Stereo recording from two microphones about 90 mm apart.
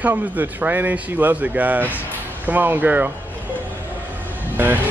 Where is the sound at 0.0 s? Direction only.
20° right (ahead or behind).